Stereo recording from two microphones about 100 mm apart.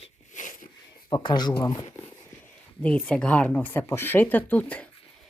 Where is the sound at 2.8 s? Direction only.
10° left (ahead or behind).